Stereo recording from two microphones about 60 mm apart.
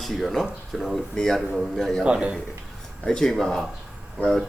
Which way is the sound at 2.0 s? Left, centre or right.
Centre.